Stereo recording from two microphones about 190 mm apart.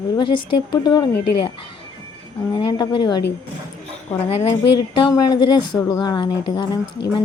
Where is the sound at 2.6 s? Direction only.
25° left (ahead or behind).